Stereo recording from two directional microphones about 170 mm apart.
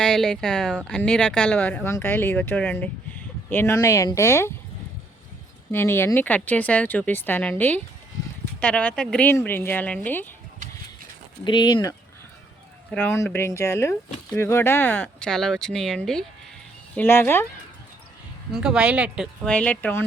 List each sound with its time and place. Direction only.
0.0 s speech: 5° left (ahead or behind)
5.7 s speech: 15° left (ahead or behind)
11.4 s speech: 25° left (ahead or behind)
12.9 s speech: 10° left (ahead or behind)
18.5 s speech: 5° right (ahead or behind)
19.5 s speech: 5° left (ahead or behind)